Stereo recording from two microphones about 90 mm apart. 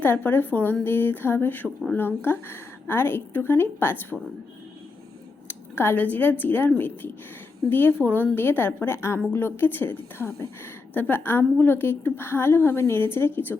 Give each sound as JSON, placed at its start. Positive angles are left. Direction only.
{"t": 0.0, "sound": "a woman's voice", "side_deg": 20}
{"t": 5.5, "sound": "a woman's voice", "side_deg": 25}